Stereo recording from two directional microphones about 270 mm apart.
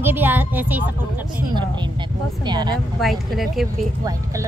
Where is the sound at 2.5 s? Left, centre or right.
Centre.